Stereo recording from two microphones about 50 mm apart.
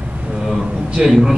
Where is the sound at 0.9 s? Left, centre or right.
Centre.